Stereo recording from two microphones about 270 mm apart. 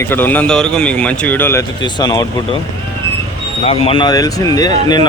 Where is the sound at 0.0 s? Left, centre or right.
Centre.